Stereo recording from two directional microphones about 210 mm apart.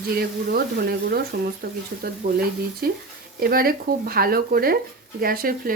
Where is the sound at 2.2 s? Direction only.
40° right (ahead or behind).